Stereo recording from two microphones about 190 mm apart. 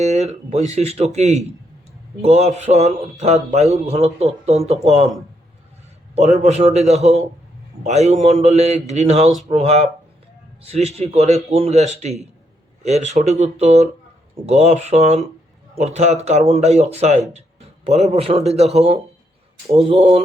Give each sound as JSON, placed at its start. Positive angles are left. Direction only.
{"t": 0.0, "sound": "speech", "side_deg": -35}
{"t": 6.1, "sound": "speech", "side_deg": -35}